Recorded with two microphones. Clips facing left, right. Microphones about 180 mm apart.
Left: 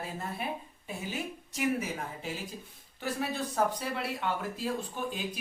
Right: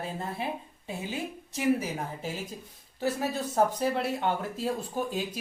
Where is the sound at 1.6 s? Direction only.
35° right (ahead or behind).